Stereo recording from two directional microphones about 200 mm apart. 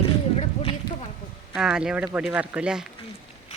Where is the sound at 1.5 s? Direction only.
5° right (ahead or behind).